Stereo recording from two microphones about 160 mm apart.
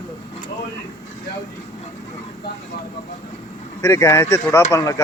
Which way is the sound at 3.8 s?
20° left (ahead or behind).